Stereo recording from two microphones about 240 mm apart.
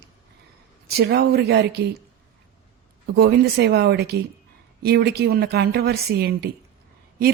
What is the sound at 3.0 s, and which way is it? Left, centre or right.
A woman's voice, right.